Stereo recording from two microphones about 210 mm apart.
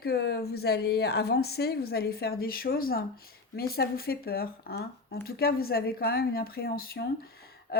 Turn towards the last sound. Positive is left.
turn(degrees=45)  # may be behind; listen again after turning